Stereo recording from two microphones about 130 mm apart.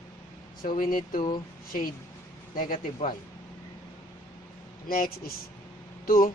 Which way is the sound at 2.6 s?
90° left.